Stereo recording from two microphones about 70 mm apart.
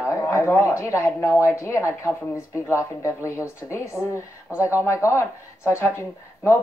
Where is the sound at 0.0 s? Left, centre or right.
Left.